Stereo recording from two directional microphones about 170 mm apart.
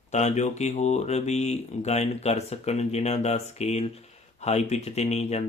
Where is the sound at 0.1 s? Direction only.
45° left (ahead or behind).